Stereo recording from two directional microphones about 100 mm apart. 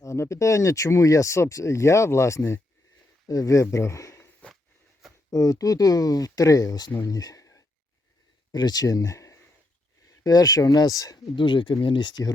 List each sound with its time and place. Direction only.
0.0 s speech: 30° left (ahead or behind)
5.3 s speech: 35° left (ahead or behind)
11.3 s speech: 50° left (ahead or behind)